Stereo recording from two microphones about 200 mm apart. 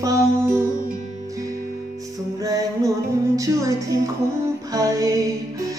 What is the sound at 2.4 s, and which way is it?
Music, 15° right (ahead or behind).